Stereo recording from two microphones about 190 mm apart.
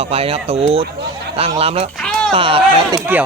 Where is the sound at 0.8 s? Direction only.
60° right (ahead or behind).